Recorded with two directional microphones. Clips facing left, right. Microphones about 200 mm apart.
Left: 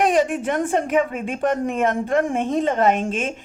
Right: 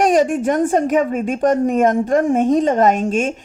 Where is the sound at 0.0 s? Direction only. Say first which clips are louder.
Right 4 dB; 45° right (ahead or behind).